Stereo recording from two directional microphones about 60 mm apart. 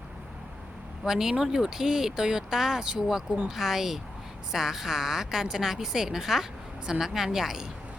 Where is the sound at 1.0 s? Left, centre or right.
Centre.